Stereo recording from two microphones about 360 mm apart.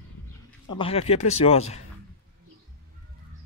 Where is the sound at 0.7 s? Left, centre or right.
Centre.